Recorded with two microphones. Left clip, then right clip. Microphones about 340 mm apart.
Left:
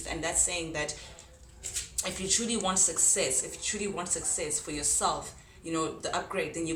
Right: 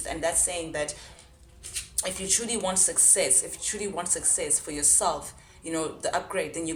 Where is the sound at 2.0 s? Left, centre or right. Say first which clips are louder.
Right 2 dB; centre.